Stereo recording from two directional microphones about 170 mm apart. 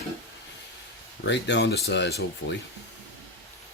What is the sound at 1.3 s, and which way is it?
Speech, 90° left.